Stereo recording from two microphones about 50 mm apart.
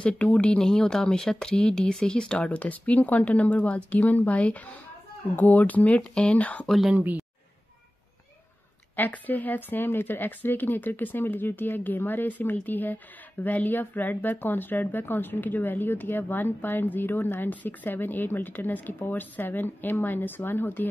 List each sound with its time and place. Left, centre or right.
0.0 s speech: left
8.9 s speech: left